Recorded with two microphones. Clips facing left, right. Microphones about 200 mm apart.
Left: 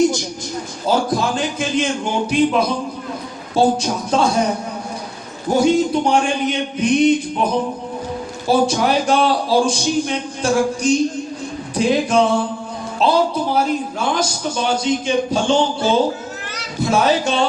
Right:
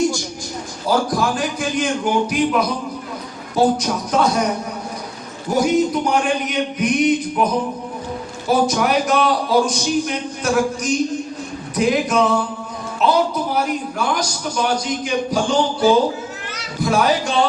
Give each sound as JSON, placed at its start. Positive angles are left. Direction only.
{"t": 0.9, "sound": "speech", "side_deg": 25}
{"t": 5.5, "sound": "speech", "side_deg": 30}
{"t": 8.4, "sound": "speech", "side_deg": 30}